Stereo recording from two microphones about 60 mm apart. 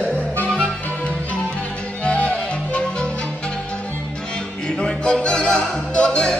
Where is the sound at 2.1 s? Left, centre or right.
Left.